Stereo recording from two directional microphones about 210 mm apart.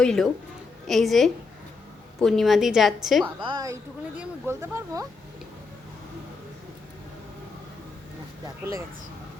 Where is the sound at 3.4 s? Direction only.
20° right (ahead or behind).